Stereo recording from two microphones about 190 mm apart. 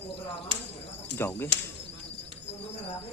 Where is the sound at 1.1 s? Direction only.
10° left (ahead or behind).